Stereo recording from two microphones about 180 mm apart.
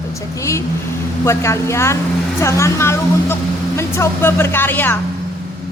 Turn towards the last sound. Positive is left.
turn(degrees=10)  # may be behind; listen again after turning